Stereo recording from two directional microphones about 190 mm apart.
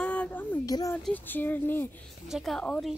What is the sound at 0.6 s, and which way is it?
Speech, 20° left (ahead or behind).